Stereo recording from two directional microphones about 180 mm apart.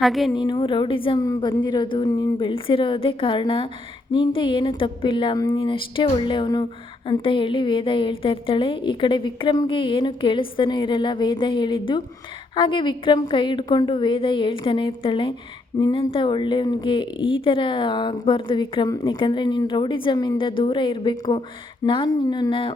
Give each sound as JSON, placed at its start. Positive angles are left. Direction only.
{"t": 0.0, "sound": "a woman's voice", "side_deg": 0}
{"t": 0.3, "sound": "speech", "side_deg": 25}